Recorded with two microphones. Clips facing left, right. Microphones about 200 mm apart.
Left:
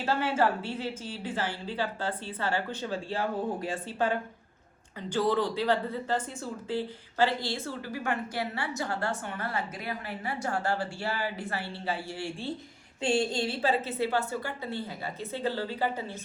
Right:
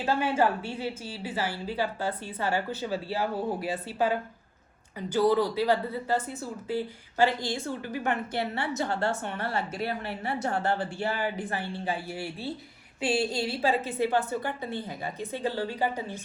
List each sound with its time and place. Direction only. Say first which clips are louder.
0.0 s a woman's voice: right 1 dB; 15° right (ahead or behind)